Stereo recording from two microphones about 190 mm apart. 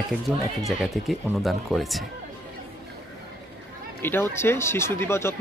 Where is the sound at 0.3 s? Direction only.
10° left (ahead or behind).